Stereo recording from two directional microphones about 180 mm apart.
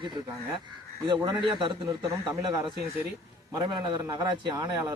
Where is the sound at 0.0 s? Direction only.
25° right (ahead or behind).